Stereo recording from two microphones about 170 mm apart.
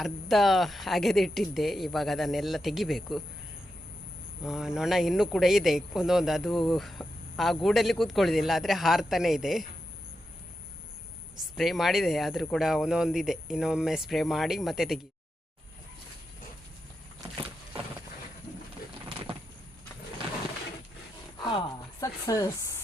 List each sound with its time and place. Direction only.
0.0 s speech: centre (ahead or behind)
4.4 s speech: 5° right (ahead or behind)
11.5 s speech: centre (ahead or behind)
22.0 s speech: 20° left (ahead or behind)